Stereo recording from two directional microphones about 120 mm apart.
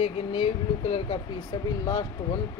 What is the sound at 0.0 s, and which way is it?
Speech, 50° left (ahead or behind).